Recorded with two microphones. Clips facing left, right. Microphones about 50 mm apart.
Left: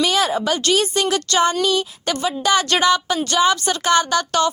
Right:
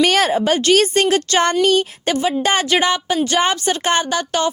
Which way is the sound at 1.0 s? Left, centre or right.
Right.